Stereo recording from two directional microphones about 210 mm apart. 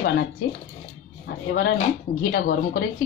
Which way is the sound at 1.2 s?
50° left (ahead or behind).